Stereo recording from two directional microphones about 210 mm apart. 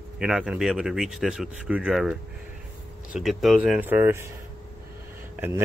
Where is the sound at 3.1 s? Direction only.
Centre (ahead or behind).